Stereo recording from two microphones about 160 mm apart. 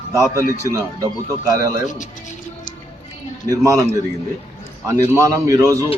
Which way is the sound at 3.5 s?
20° right (ahead or behind).